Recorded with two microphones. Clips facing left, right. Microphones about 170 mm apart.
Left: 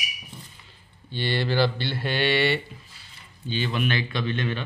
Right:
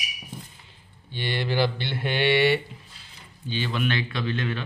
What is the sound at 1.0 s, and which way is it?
Mantra, 15° right (ahead or behind).